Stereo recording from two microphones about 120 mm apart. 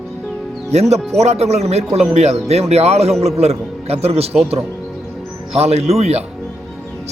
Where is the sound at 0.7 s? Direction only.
65° right (ahead or behind).